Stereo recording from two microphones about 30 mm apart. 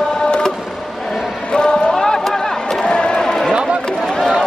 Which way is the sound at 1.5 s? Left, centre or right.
Left.